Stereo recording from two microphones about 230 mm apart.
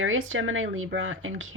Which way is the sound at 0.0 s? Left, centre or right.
Right.